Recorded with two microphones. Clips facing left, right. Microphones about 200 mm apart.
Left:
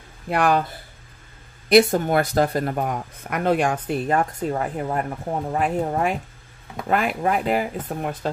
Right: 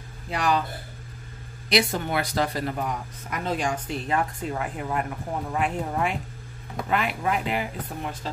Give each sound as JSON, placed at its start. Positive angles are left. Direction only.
{"t": 0.3, "sound": "speech", "side_deg": 55}
{"t": 1.7, "sound": "speech", "side_deg": 50}